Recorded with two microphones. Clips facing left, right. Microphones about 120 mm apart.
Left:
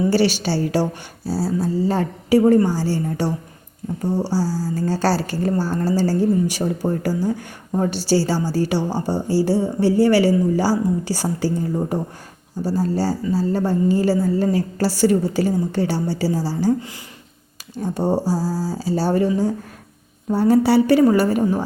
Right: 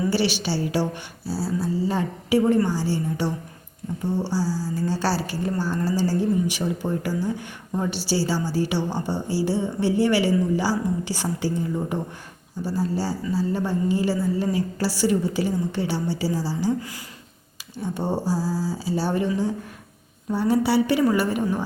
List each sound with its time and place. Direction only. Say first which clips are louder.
0.1 s a woman's voice: left 5 dB; 45° left (ahead or behind)
4.3 s a woman's voice: left 4 dB; 45° left (ahead or behind)
17.8 s a woman's voice: left 4 dB; 40° left (ahead or behind)
18.3 s a sound: left 3 dB; 10° left (ahead or behind)
18.5 s a woman's voice: left 3 dB; 40° left (ahead or behind)
20.3 s a woman's voice: left 5 dB; 45° left (ahead or behind)